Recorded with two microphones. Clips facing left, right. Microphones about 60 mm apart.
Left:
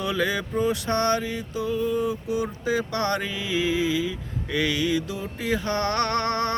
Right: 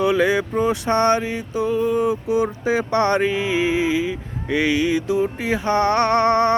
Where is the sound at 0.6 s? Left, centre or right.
Right.